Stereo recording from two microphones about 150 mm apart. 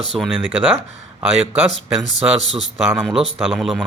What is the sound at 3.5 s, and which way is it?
Speech, centre (ahead or behind).